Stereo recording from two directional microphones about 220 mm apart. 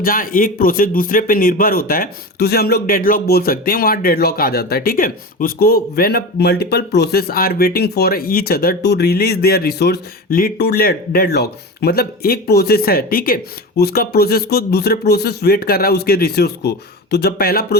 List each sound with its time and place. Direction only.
0.0 s speech: 40° left (ahead or behind)